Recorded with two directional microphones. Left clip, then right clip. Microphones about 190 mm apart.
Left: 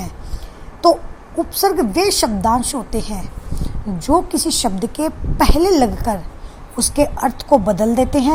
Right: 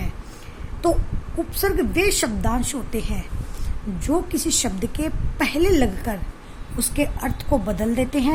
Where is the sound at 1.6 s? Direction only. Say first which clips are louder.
Left 5 dB; 15° left (ahead or behind).